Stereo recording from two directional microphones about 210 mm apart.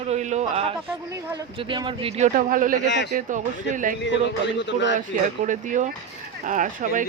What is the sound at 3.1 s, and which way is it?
Speech, 40° right (ahead or behind).